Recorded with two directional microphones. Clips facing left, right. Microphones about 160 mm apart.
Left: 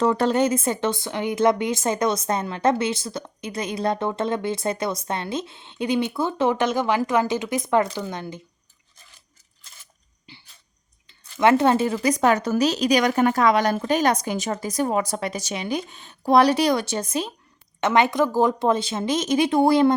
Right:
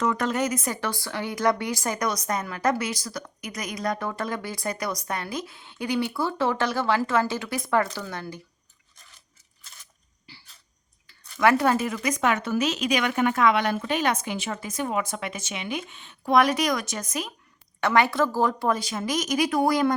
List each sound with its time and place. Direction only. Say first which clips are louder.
0.0 s speech: left 5 dB; 30° left (ahead or behind)
10.3 s a sound: left 3 dB; 20° left (ahead or behind)
11.0 s speech: left 3 dB; 25° left (ahead or behind)